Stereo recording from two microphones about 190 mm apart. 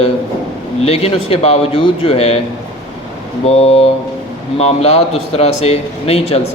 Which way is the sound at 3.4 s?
35° left (ahead or behind).